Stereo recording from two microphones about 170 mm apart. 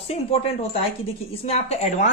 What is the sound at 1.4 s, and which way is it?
Speech, 40° left (ahead or behind).